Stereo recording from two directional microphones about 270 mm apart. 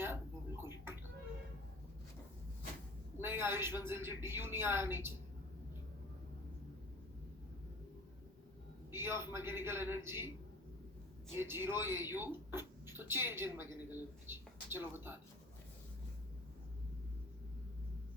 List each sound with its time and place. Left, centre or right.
0.0 s a sound: centre
3.2 s a woman's voice: centre
8.9 s a woman's voice: centre
11.3 s speech: centre